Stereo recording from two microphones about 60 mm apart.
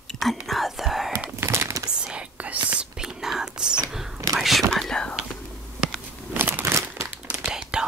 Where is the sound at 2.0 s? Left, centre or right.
Centre.